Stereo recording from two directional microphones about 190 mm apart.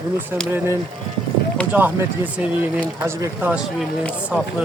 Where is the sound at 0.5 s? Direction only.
15° right (ahead or behind).